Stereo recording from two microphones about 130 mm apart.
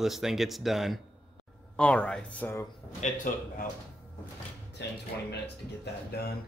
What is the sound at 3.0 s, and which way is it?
Speech, 85° left.